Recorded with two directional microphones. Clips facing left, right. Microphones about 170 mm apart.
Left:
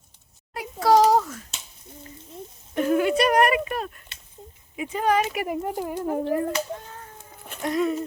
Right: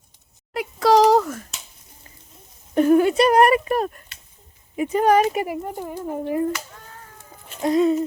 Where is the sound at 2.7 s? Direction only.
35° right (ahead or behind).